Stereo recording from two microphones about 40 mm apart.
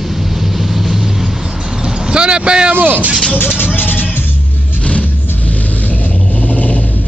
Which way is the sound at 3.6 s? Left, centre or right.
Left.